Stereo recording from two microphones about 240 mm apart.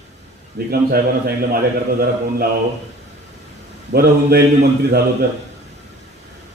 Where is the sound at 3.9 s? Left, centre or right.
Right.